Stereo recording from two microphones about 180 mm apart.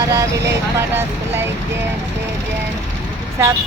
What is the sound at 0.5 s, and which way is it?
Music, 15° right (ahead or behind).